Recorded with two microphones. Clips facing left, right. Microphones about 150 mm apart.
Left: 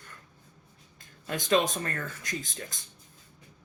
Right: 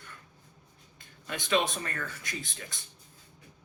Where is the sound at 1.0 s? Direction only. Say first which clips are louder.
Left 4 dB; 45° left (ahead or behind).